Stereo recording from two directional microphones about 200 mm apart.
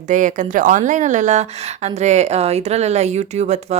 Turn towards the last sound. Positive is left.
turn(degrees=-35)  # may be behind; listen again after turning